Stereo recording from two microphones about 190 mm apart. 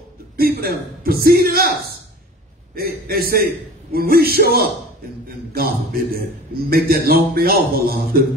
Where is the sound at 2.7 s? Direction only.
50° right (ahead or behind).